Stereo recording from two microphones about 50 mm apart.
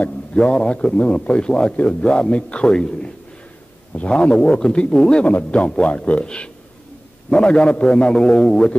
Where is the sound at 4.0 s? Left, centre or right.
Left.